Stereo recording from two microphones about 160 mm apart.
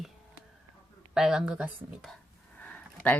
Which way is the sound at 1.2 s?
5° right (ahead or behind).